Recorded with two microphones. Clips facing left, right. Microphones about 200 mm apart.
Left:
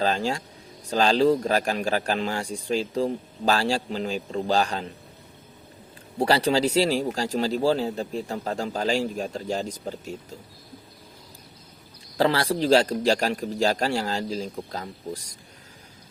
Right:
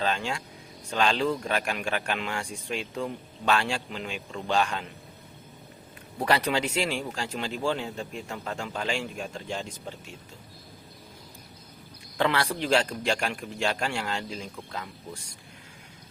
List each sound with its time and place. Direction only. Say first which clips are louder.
0.0 s a man's voice: left 5 dB; 35° left (ahead or behind)
6.1 s a man's voice: left 4 dB; 30° left (ahead or behind)
12.1 s a man's voice: left 4 dB; 35° left (ahead or behind)